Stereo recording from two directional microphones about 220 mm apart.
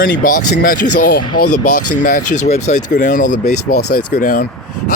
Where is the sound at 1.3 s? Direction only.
90° left.